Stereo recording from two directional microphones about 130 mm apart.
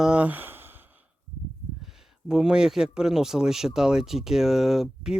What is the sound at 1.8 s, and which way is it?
Speech, 5° right (ahead or behind).